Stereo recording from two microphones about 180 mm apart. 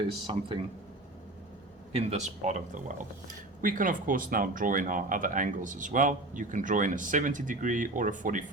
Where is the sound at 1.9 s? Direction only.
40° right (ahead or behind).